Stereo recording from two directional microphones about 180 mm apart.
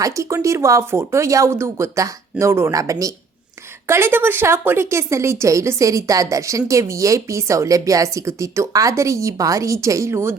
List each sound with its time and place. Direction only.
0.0 s speech: 15° right (ahead or behind)